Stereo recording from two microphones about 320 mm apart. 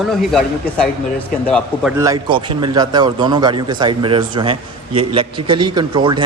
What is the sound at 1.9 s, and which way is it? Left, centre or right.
A man's voice, centre.